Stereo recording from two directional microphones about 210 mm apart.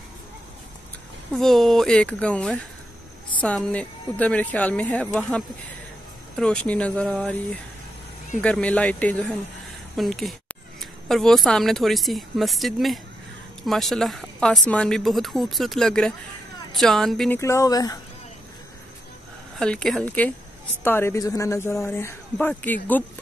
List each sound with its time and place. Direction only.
1.3 s a woman's voice: centre (ahead or behind)
8.4 s a woman's voice: 5° left (ahead or behind)
17.4 s speech: 15° left (ahead or behind)
19.6 s a woman's voice: 5° left (ahead or behind)